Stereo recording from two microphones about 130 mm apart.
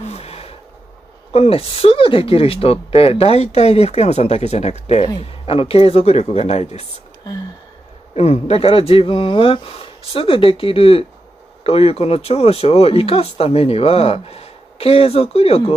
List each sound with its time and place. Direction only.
0.0 s gasp: 55° left (ahead or behind)
1.3 s speech: 50° left (ahead or behind)
5.2 s speech: 45° left (ahead or behind)
8.1 s speech: 55° left (ahead or behind)